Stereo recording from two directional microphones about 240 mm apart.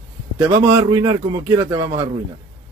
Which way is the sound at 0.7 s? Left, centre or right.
Centre.